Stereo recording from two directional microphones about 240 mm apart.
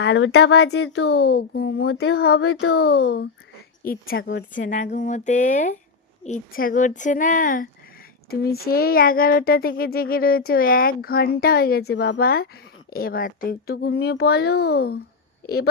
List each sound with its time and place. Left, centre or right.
0.0 s speech: left
4.2 s speech: left
4.6 s speech: left